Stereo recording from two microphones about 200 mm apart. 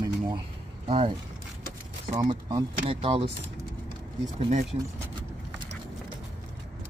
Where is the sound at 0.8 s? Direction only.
25° right (ahead or behind).